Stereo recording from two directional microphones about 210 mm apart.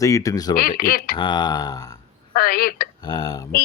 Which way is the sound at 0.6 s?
45° left (ahead or behind).